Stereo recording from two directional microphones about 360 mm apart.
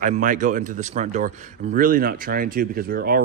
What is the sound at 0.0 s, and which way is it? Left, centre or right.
A man's voice, right.